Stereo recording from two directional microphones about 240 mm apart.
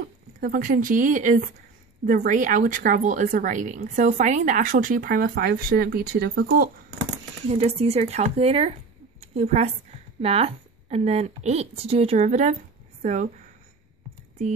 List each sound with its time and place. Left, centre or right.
0.4 s a woman's voice: right
7.4 s a woman's voice: right